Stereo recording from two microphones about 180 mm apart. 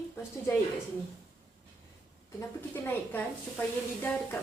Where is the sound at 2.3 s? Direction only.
10° left (ahead or behind).